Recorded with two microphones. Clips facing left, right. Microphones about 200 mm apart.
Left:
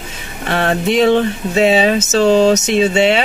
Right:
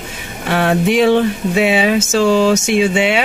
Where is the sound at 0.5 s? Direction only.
10° right (ahead or behind).